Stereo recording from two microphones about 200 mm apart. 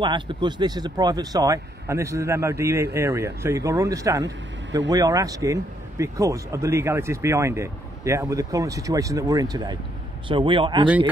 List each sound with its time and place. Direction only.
0.0 s speech: 25° right (ahead or behind)